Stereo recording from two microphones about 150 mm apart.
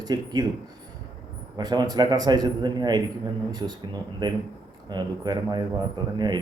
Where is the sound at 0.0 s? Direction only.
25° right (ahead or behind).